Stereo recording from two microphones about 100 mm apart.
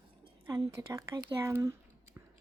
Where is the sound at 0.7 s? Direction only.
30° right (ahead or behind).